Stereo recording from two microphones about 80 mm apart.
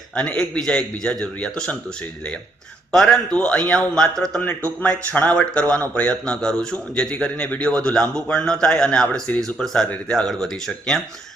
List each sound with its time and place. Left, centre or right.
0.2 s a man's voice: centre
2.9 s a man's voice: centre